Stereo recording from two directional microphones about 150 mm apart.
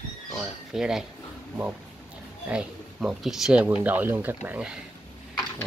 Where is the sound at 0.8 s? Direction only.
5° right (ahead or behind).